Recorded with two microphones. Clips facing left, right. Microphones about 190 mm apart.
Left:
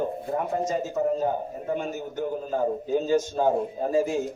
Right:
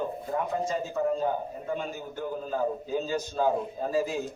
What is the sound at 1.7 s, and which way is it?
A man's voice, 45° left (ahead or behind).